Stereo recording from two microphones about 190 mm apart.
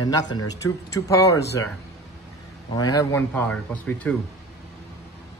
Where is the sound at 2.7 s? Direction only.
20° left (ahead or behind).